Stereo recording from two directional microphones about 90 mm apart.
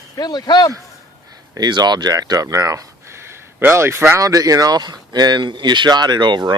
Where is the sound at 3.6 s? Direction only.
25° right (ahead or behind).